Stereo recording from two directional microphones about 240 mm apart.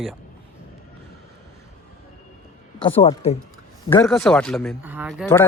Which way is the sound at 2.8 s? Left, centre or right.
Left.